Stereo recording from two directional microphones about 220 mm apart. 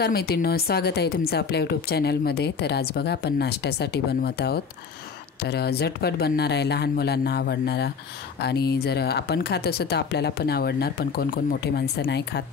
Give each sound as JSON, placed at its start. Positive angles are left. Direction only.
{"t": 0.0, "sound": "a woman's voice", "side_deg": 45}